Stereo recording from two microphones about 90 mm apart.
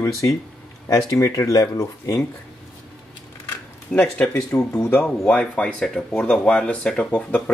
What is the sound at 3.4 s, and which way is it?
Camera, 20° left (ahead or behind).